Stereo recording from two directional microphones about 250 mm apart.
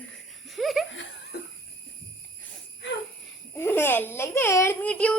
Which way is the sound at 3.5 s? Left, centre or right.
Centre.